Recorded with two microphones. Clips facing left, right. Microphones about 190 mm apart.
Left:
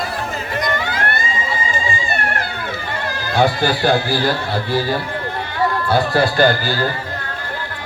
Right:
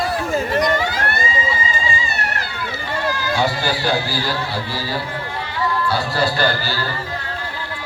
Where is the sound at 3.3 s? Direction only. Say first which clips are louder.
Left 7 dB; 55° left (ahead or behind).